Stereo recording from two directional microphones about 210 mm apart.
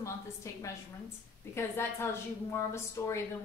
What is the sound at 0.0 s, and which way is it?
A woman's voice, 15° left (ahead or behind).